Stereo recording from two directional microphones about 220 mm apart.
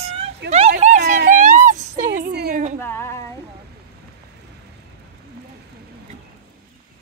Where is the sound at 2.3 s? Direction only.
45° right (ahead or behind).